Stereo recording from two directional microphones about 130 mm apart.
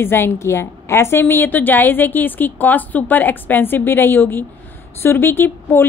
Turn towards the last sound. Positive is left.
turn(degrees=15)  # may be behind; listen again after turning